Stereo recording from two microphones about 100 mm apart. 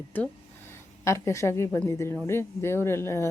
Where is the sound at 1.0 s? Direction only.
30° left (ahead or behind).